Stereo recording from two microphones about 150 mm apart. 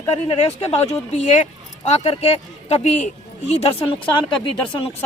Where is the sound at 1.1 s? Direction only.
50° left (ahead or behind).